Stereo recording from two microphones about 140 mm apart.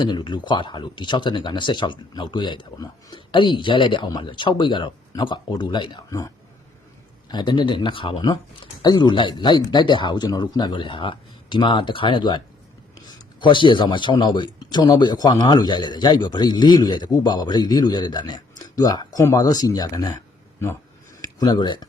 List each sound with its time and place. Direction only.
0.0 s speech: 30° left (ahead or behind)
21.2 s speech: 30° left (ahead or behind)